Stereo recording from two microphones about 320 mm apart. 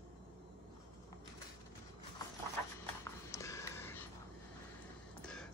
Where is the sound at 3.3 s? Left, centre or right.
Centre.